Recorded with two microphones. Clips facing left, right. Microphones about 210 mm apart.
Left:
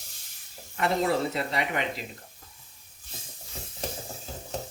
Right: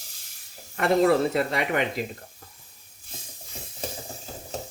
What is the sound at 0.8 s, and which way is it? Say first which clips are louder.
Speech: right 6 dB; 50° right (ahead or behind).